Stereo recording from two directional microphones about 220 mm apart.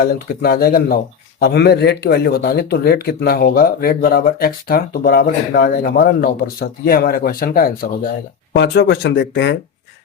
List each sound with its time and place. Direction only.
0.0 s speech: 45° left (ahead or behind)